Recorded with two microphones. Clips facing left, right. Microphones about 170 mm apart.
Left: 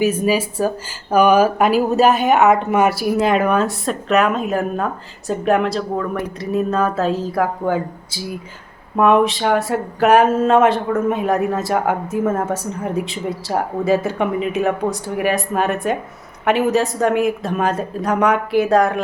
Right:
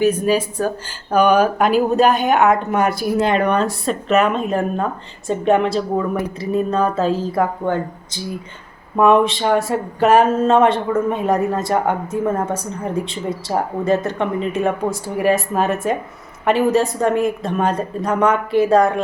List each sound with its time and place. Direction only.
0.0 s speech: 5° left (ahead or behind)